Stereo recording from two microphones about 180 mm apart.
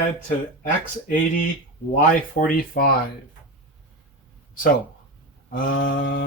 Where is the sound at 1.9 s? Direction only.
45° left (ahead or behind).